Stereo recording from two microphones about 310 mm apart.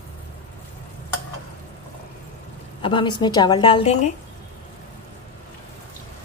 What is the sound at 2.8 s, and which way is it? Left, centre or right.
A woman's voice, centre.